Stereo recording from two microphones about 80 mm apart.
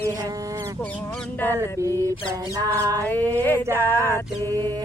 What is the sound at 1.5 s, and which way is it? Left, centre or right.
Music, right.